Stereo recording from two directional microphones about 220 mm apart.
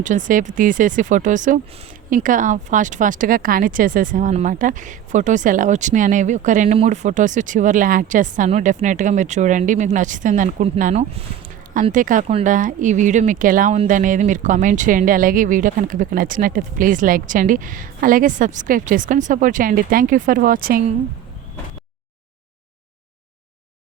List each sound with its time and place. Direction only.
0.0 s speech: 35° right (ahead or behind)